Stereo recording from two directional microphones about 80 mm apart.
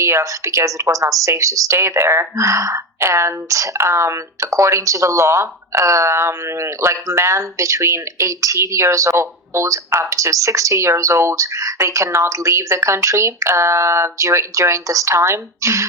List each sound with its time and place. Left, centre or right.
0.0 s speech: right